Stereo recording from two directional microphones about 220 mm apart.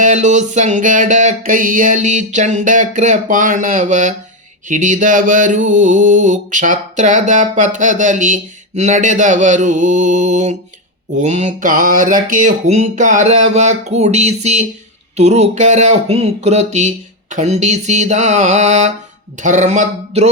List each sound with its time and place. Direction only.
0.0 s mantra: 35° right (ahead or behind)